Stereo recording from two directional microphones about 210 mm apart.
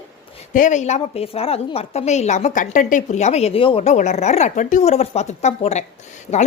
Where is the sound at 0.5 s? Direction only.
35° left (ahead or behind).